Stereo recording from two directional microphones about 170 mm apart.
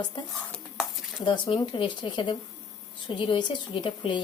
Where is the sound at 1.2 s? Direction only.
30° left (ahead or behind).